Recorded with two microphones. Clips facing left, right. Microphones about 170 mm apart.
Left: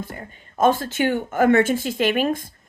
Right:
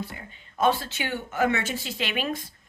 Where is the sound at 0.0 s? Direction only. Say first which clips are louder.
Left 3 dB; 45° left (ahead or behind).